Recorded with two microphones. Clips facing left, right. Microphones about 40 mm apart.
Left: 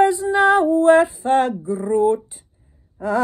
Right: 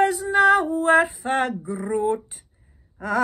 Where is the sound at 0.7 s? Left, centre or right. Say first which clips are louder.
Left 5 dB; centre.